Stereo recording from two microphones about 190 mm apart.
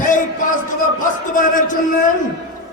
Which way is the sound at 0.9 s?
45° left (ahead or behind).